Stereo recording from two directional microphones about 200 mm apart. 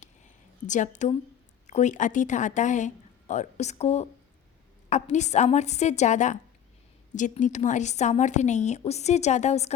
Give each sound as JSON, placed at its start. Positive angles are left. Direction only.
{"t": 0.7, "sound": "a woman's voice", "side_deg": 35}